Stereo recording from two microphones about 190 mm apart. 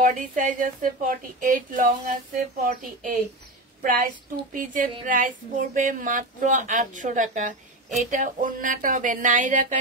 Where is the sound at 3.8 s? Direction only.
45° right (ahead or behind).